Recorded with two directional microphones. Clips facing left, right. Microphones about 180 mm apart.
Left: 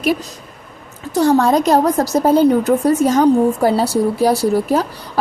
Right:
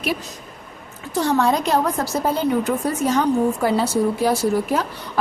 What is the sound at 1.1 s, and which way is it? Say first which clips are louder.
A woman's voice: left 6 dB; 40° left (ahead or behind).